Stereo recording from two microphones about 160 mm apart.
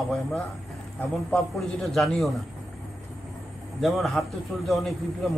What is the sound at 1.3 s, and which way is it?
A man's voice, centre (ahead or behind).